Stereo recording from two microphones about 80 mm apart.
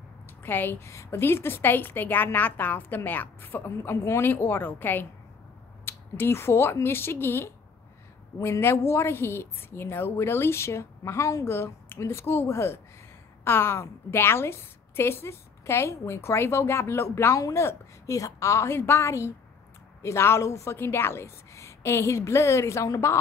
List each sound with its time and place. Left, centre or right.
0.4 s a woman's voice: left